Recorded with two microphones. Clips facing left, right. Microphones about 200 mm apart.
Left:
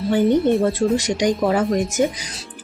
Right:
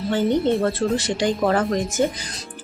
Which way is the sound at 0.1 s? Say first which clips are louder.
Left 3 dB; 15° left (ahead or behind).